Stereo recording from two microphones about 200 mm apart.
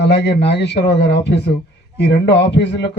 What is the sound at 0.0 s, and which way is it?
Speech, 55° left (ahead or behind).